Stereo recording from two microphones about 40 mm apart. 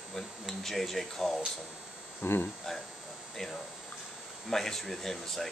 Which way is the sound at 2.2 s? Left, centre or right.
Left.